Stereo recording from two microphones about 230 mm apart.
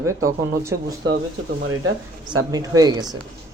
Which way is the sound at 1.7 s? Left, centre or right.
Right.